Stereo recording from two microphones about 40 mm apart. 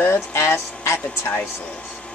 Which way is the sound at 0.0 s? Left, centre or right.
Left.